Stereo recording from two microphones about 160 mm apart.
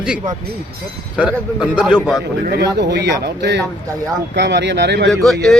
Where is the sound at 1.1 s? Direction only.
5° right (ahead or behind).